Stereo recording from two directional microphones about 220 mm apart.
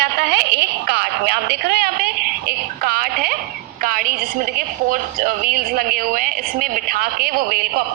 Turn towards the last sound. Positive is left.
turn(degrees=-45)  # may be behind; listen again after turning